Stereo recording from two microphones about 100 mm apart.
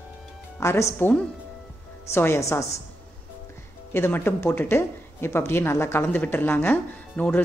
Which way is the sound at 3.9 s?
20° left (ahead or behind).